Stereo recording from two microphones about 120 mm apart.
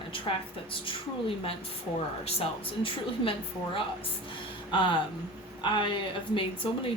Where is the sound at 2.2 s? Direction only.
55° left (ahead or behind).